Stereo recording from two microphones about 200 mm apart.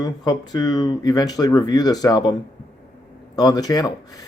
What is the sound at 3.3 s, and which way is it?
Speech, 20° left (ahead or behind).